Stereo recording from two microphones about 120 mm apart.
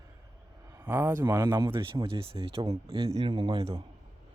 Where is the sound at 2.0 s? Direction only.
50° right (ahead or behind).